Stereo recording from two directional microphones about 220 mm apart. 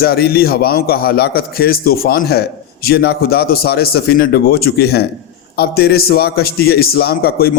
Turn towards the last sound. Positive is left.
turn(degrees=45)  # may be behind; listen again after turning